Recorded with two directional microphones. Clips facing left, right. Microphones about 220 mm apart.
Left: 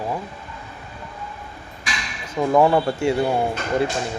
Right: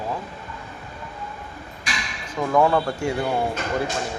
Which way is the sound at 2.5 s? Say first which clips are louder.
Left 2 dB; 20° left (ahead or behind).